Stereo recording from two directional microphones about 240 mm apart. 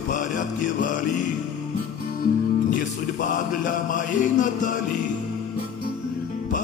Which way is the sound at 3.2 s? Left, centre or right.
Left.